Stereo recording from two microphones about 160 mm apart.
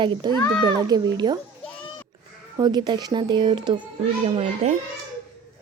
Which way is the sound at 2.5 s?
25° right (ahead or behind).